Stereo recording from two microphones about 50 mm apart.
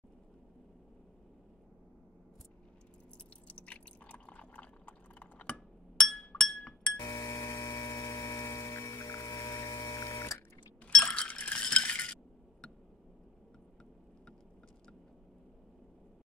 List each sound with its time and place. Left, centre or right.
3.4 s drip: left
5.9 s glass: centre
7.0 s mains hum: left
11.1 s chink: left